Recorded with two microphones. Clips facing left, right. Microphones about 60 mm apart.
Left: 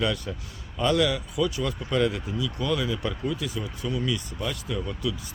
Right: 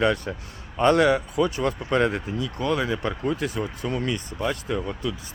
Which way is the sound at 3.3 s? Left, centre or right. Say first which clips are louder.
Right 5 dB; right.